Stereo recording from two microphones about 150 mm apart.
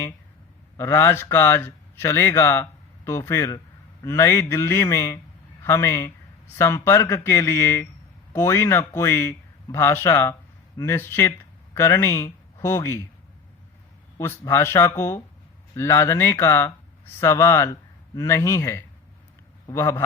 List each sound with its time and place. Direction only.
0.8 s a man's voice: 15° left (ahead or behind)
14.2 s a man's voice: 15° left (ahead or behind)